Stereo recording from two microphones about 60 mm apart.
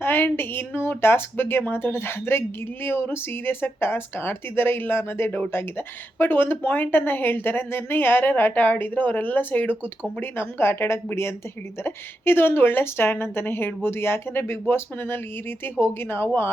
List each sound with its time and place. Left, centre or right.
0.0 s speech: left